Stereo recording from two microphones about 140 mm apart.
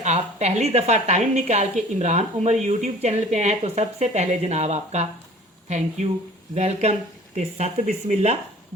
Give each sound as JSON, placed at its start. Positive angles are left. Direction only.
{"t": 0.0, "sound": "a woman's voice", "side_deg": -55}